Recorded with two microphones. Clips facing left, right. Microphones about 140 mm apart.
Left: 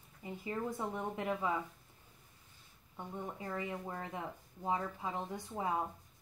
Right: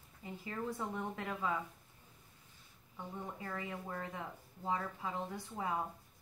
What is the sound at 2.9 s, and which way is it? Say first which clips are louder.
Speech: left 2 dB; 20° left (ahead or behind).